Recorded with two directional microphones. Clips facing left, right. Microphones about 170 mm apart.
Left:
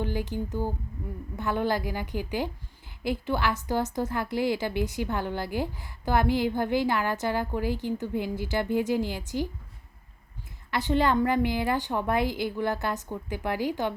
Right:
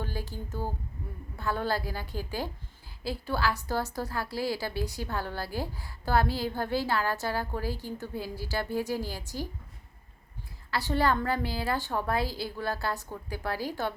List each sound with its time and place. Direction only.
0.0 s a woman's voice: 20° left (ahead or behind)
10.7 s a woman's voice: 20° left (ahead or behind)